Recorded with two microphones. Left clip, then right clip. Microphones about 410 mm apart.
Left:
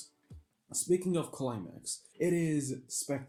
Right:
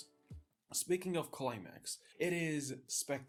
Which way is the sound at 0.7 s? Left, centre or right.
Centre.